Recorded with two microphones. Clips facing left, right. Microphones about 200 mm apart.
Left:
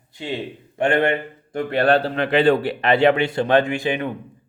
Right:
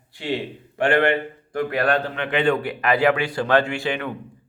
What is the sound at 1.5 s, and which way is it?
A man's voice, 25° left (ahead or behind).